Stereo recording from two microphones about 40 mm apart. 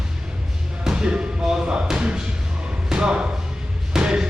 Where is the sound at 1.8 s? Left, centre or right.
Right.